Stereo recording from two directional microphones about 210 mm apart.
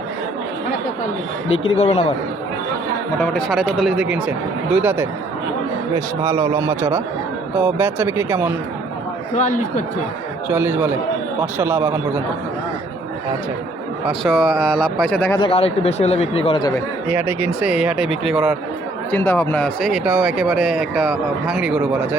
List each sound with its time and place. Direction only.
1.5 s speech: 30° left (ahead or behind)
3.2 s a man's voice: 5° left (ahead or behind)
9.3 s a man's voice: 35° left (ahead or behind)
10.5 s a man's voice: 10° right (ahead or behind)
14.1 s speech: centre (ahead or behind)
15.4 s speech: 25° left (ahead or behind)
17.1 s speech: 10° right (ahead or behind)
19.1 s speech: 10° left (ahead or behind); by 22.2 s 5° right (ahead or behind)